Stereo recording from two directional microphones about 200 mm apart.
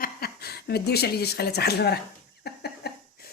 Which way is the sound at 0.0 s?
50° left (ahead or behind).